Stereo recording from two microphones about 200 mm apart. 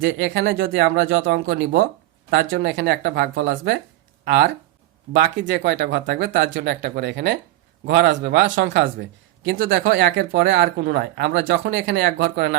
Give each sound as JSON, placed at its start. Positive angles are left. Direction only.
{"t": 0.0, "sound": "a man's voice", "side_deg": -65}